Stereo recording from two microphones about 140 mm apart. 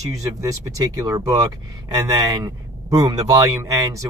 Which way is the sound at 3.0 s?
25° right (ahead or behind).